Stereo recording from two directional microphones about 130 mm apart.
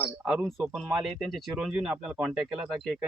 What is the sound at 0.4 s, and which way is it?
Speech, centre (ahead or behind).